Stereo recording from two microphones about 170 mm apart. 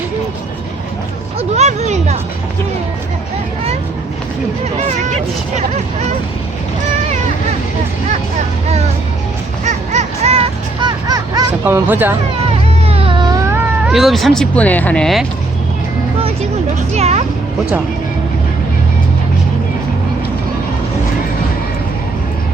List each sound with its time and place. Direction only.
1.4 s a sound: 40° right (ahead or behind)
5.5 s speech: 40° right (ahead or behind)
9.6 s music: 40° right (ahead or behind); by 11.4 s 25° right (ahead or behind)
11.6 s speech: 10° right (ahead or behind)
12.9 s cat: 30° right (ahead or behind)
13.8 s speech: centre (ahead or behind)
16.9 s speech: 40° right (ahead or behind)